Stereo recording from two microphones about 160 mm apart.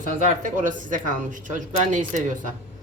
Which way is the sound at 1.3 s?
50° right (ahead or behind).